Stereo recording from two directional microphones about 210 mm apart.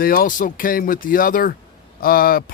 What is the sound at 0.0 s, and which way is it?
Speech, 45° left (ahead or behind).